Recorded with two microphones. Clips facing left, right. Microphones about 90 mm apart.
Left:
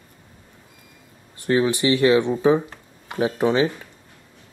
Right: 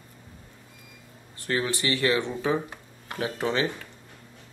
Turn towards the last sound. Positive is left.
turn(degrees=15)  # may be behind; listen again after turning